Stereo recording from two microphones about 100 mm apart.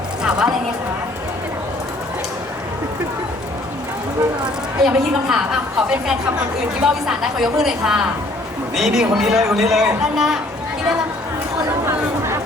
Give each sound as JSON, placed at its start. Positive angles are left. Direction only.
{"t": 0.2, "sound": "a sound", "side_deg": -10}
{"t": 4.8, "sound": "a man's voice", "side_deg": -5}
{"t": 11.9, "sound": "chatter", "side_deg": -25}